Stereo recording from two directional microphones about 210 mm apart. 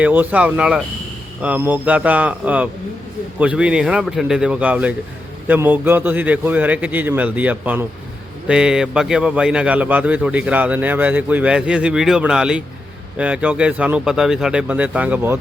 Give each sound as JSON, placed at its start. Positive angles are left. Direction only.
{"t": 0.0, "sound": "a man's voice", "side_deg": -10}